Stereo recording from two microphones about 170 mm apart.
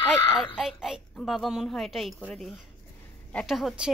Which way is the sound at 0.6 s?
5° right (ahead or behind).